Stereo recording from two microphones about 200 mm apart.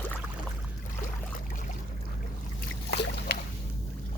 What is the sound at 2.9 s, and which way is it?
Boat, 55° left (ahead or behind).